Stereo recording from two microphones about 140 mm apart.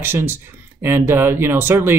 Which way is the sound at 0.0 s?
15° right (ahead or behind).